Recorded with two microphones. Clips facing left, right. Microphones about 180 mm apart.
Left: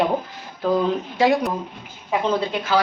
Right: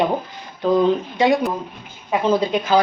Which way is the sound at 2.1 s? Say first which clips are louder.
Right 4 dB; 15° right (ahead or behind).